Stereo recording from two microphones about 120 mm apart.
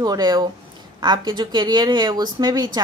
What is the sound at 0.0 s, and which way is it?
Speech, 35° right (ahead or behind).